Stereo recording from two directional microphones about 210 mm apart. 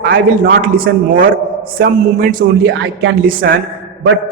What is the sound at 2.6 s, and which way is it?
Speech, 60° right (ahead or behind).